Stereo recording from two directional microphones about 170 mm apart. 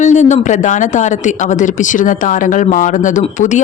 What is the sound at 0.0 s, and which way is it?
Speech, 45° left (ahead or behind).